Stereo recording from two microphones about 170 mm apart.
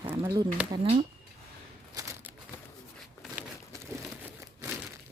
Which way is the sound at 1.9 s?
20° right (ahead or behind).